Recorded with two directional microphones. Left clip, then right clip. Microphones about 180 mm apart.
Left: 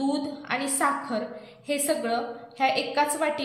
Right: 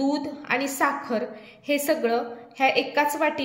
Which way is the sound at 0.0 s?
35° right (ahead or behind).